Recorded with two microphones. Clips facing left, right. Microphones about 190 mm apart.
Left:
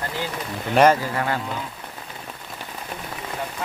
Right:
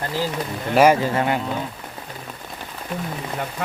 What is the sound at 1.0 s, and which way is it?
Speech, 20° right (ahead or behind).